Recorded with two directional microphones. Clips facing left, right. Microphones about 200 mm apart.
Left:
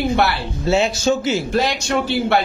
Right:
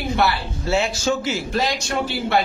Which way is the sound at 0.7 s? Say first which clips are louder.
Left 4 dB; 20° left (ahead or behind).